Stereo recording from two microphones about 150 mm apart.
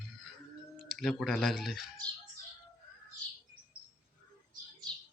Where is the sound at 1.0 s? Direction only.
Centre (ahead or behind).